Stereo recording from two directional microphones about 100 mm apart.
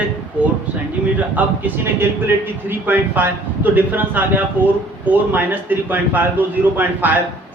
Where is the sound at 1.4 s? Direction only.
20° right (ahead or behind).